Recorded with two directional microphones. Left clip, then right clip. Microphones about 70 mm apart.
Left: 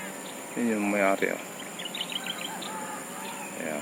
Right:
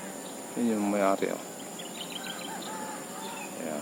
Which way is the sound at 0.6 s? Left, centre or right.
Centre.